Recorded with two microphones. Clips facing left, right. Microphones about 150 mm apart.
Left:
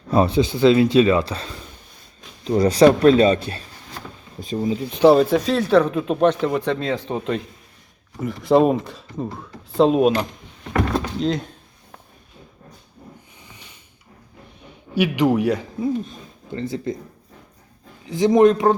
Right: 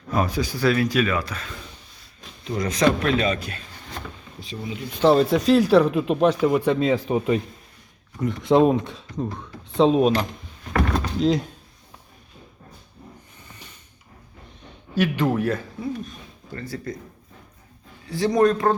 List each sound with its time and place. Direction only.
0.1 s speech: 30° left (ahead or behind)
4.4 s speech: 45° left (ahead or behind)
4.9 s speech: 15° left (ahead or behind)
5.1 s speech: centre (ahead or behind)
6.7 s speech: 10° right (ahead or behind)
8.2 s speech: centre (ahead or behind)
14.9 s speech: 15° left (ahead or behind)
18.0 s speech: 20° left (ahead or behind)